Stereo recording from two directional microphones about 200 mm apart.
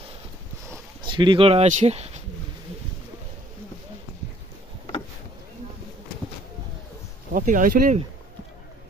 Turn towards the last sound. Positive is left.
turn(degrees=-45)  # may be behind; listen again after turning